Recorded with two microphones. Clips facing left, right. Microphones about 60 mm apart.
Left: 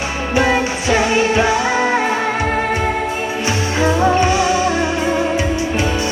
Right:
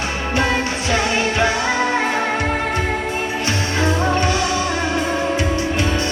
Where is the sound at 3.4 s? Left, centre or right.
Left.